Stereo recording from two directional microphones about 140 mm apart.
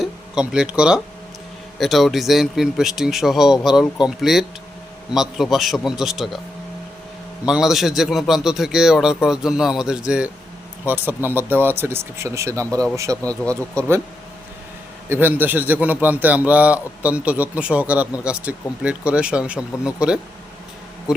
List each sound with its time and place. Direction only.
0.0 s a man's voice: 5° right (ahead or behind)
7.4 s a man's voice: 5° right (ahead or behind); by 13.3 s 25° right (ahead or behind)
13.4 s speech: 10° left (ahead or behind)
15.1 s a man's voice: 15° right (ahead or behind)